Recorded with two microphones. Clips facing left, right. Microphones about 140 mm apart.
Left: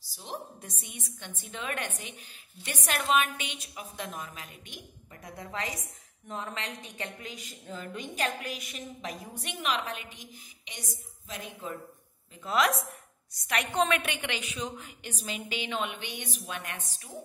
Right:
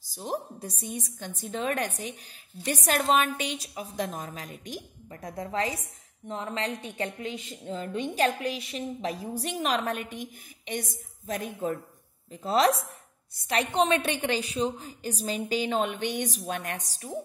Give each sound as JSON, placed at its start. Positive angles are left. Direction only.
{"t": 0.0, "sound": "a woman's voice", "side_deg": -45}
{"t": 12.3, "sound": "a woman's voice", "side_deg": -30}